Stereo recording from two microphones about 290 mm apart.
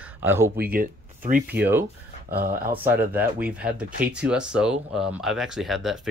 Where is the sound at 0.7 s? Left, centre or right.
Right.